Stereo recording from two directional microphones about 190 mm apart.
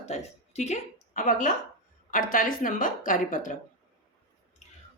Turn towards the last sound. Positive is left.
turn(degrees=45)  # may be behind; listen again after turning